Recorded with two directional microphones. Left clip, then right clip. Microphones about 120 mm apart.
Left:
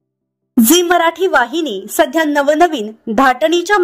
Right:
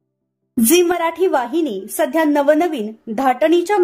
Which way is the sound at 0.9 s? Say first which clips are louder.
Left 5 dB; 50° left (ahead or behind).